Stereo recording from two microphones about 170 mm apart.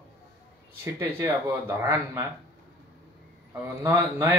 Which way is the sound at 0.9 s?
15° right (ahead or behind).